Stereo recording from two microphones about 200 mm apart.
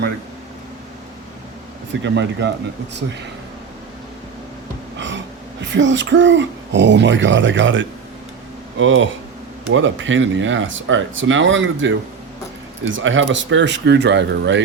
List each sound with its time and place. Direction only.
1.9 s speech: 60° right (ahead or behind)
4.9 s gasp: 65° right (ahead or behind)
5.7 s speech: 65° right (ahead or behind)